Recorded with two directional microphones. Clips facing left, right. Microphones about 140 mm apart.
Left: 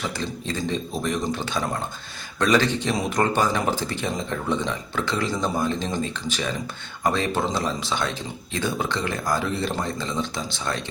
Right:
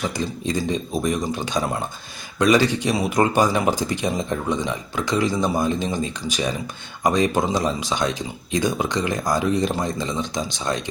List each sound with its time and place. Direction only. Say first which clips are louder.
0.2 s speech: right 4 dB; 15° right (ahead or behind)